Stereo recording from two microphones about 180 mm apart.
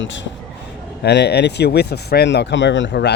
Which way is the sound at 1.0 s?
70° left (ahead or behind).